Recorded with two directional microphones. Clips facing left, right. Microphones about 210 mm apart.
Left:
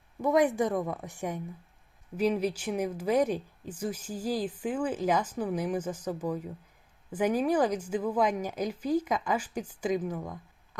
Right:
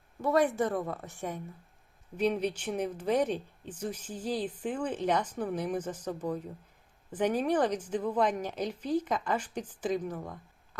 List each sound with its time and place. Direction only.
0.2 s speech: 15° left (ahead or behind)